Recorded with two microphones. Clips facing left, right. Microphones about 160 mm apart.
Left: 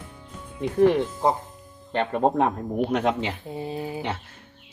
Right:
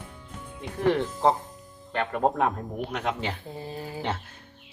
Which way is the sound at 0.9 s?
15° left (ahead or behind).